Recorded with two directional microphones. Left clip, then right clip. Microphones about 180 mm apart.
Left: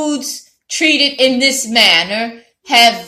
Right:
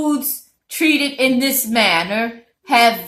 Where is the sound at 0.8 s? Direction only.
20° right (ahead or behind).